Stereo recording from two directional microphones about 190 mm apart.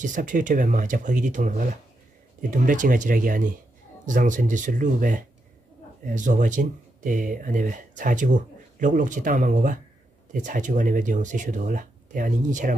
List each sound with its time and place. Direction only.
0.0 s speech: 45° right (ahead or behind)